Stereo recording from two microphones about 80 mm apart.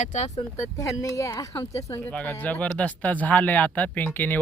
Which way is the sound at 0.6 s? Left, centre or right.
Left.